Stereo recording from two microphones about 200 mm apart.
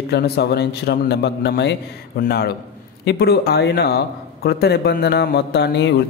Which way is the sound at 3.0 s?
55° left (ahead or behind).